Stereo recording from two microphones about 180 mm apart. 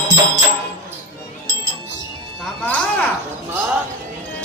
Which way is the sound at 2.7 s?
10° left (ahead or behind).